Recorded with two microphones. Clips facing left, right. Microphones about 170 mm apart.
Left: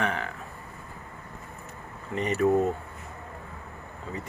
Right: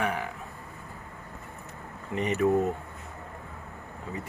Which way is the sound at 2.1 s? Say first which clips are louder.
Left 1 dB; 15° right (ahead or behind).